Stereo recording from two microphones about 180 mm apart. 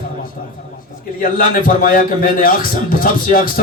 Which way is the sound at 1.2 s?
50° left (ahead or behind).